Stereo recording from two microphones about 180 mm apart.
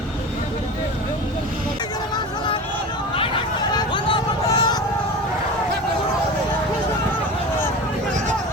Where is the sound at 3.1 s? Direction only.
30° left (ahead or behind).